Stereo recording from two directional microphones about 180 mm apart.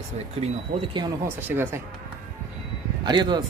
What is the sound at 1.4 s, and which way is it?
Speech, 10° right (ahead or behind).